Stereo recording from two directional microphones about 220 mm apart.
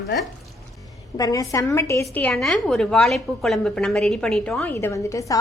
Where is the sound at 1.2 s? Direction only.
15° left (ahead or behind).